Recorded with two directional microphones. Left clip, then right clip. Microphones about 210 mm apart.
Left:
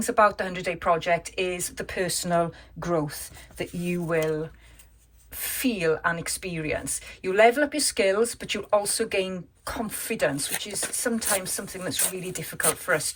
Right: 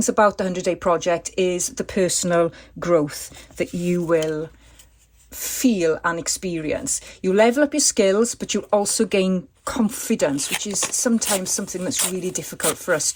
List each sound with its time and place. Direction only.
0.0 s speech: 25° right (ahead or behind)
5.4 s speech: 30° right (ahead or behind)